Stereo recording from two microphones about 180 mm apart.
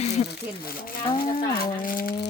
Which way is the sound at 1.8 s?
50° left (ahead or behind).